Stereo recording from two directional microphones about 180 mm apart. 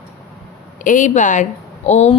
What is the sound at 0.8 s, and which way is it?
Speech, 45° left (ahead or behind).